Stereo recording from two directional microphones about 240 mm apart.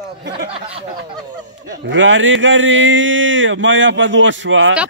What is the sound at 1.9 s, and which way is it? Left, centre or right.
A man's voice, right.